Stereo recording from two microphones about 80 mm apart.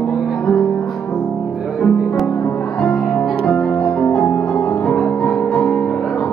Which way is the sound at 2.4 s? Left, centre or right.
Centre.